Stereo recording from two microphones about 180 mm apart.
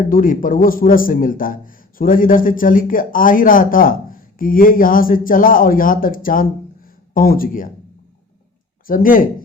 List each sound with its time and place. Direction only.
0.1 s a man's voice: 50° left (ahead or behind)
8.9 s a man's voice: 50° left (ahead or behind)